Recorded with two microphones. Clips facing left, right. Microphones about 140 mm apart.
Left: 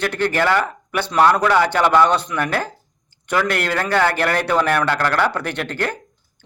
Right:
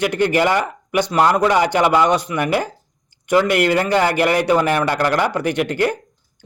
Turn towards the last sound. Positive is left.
turn(degrees=-10)  # may be behind; listen again after turning